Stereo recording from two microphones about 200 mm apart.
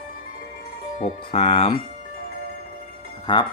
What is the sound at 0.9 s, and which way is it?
Speech, 30° left (ahead or behind).